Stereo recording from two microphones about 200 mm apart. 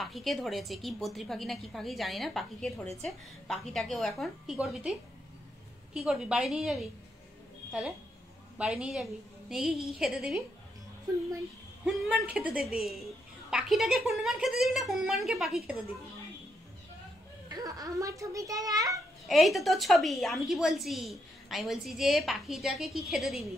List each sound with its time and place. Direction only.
0.0 s a woman's voice: centre (ahead or behind)
5.9 s a woman's voice: centre (ahead or behind)
8.5 s a woman's voice: 5° right (ahead or behind)
11.8 s a woman's voice: centre (ahead or behind)
17.5 s a child's voice: 20° right (ahead or behind)
19.2 s a woman's voice: centre (ahead or behind)